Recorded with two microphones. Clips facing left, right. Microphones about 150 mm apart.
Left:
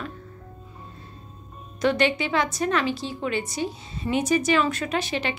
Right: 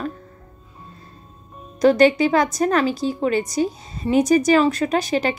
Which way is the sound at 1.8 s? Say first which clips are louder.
Right 8 dB; 40° right (ahead or behind).